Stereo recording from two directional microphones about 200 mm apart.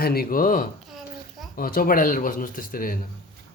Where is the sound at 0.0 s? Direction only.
50° left (ahead or behind).